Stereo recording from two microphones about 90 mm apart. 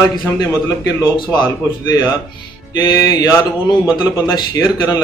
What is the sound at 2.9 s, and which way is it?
A man's voice, 50° left (ahead or behind).